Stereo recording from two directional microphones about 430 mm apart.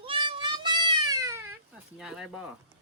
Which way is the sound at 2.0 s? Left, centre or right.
Centre.